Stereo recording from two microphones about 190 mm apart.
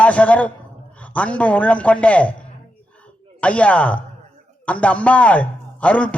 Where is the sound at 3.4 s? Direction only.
5° left (ahead or behind).